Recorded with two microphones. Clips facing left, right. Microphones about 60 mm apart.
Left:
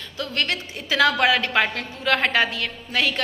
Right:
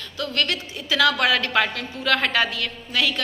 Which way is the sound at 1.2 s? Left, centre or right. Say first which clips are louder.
Left 1 dB; left.